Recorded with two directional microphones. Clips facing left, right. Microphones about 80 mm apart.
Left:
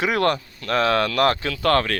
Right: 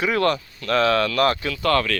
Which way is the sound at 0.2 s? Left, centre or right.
Left.